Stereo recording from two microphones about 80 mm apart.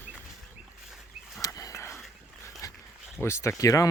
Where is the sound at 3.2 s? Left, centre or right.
Left.